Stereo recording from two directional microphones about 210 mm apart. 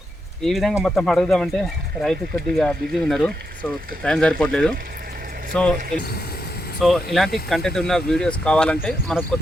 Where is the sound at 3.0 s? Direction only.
Centre (ahead or behind).